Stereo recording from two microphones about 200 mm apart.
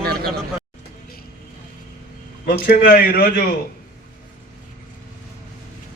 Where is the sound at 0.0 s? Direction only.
50° right (ahead or behind).